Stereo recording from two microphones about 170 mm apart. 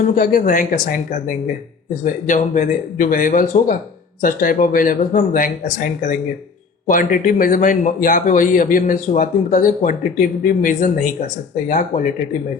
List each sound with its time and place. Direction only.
0.2 s speech: 55° left (ahead or behind)